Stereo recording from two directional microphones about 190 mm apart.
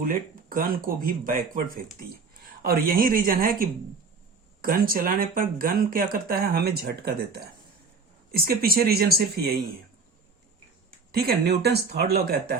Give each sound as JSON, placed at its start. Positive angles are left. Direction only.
{"t": 0.0, "sound": "speech", "side_deg": -45}
{"t": 11.1, "sound": "speech", "side_deg": -55}